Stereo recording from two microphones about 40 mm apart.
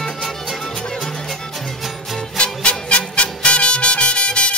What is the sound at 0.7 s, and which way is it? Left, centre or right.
Music, centre.